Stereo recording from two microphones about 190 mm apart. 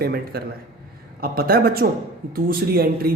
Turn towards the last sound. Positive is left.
turn(degrees=-50)  # may be behind; listen again after turning